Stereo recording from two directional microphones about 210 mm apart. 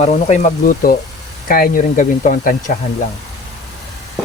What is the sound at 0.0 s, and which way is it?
Speech, 35° left (ahead or behind).